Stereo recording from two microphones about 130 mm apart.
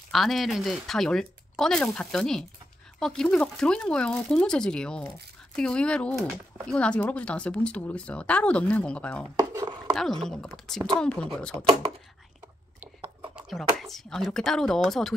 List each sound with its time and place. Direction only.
0.1 s speech: centre (ahead or behind)
9.4 s chopping: 25° right (ahead or behind)
9.9 s speech: centre (ahead or behind)
13.4 s speech: centre (ahead or behind)